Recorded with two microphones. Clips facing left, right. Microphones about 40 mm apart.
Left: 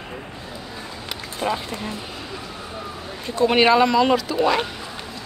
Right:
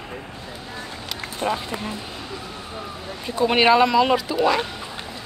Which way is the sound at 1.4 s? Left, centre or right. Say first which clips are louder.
Even; centre.